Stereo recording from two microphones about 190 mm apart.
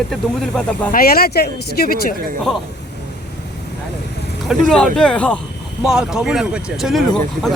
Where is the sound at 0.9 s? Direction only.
50° left (ahead or behind).